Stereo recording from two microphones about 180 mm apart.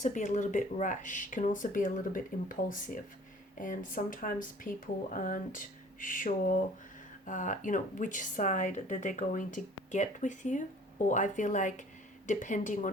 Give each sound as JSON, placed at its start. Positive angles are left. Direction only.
{"t": 0.0, "sound": "speech", "side_deg": 45}